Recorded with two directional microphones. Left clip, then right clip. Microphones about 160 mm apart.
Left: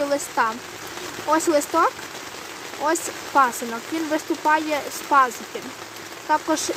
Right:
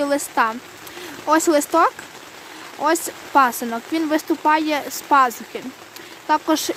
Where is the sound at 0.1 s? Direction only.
55° right (ahead or behind).